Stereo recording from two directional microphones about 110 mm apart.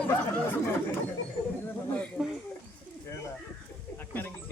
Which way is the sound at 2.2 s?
10° right (ahead or behind).